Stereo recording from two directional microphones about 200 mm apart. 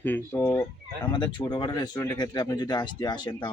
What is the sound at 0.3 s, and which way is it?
Speech, 15° left (ahead or behind).